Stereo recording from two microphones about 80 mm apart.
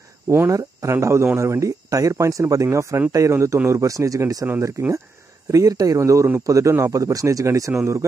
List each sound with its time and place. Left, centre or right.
0.5 s speech: right